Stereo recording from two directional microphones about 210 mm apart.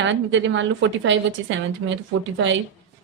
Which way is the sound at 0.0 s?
60° right (ahead or behind).